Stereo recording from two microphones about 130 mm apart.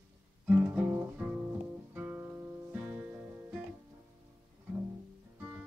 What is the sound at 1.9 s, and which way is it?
Music, 15° right (ahead or behind).